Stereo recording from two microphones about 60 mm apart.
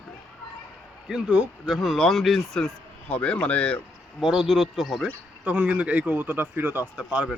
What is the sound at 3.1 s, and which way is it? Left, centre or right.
Speech, left.